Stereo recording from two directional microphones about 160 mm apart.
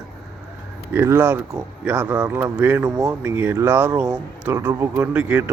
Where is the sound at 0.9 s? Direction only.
15° right (ahead or behind).